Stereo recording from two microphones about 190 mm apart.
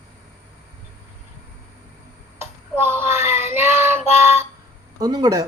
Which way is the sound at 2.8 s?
10° right (ahead or behind).